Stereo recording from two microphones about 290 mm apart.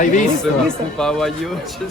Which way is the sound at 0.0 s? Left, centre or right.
Left.